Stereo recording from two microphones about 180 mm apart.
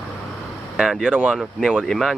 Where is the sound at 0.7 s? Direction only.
Centre (ahead or behind).